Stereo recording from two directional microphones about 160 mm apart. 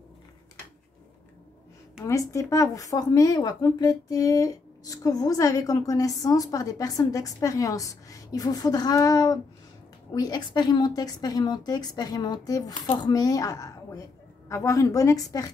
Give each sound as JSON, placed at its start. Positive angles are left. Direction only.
{"t": 2.0, "sound": "speech", "side_deg": 20}